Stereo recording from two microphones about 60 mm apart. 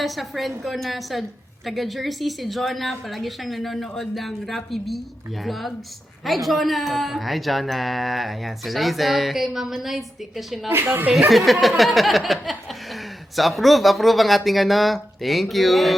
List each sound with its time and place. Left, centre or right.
0.0 s speech: centre
10.7 s speech: right
11.3 s speech: centre